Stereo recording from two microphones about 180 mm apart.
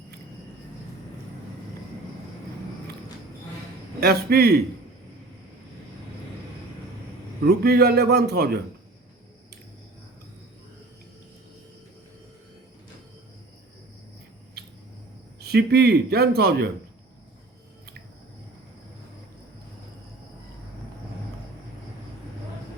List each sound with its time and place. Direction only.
4.0 s a man's voice: 60° right (ahead or behind)
7.4 s a man's voice: 60° right (ahead or behind)
15.4 s a man's voice: 60° right (ahead or behind)